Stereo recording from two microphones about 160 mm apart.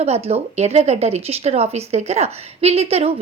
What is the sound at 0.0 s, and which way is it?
Speech, 40° right (ahead or behind).